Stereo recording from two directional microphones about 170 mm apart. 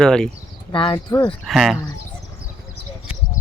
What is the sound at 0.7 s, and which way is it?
Speech, 30° left (ahead or behind).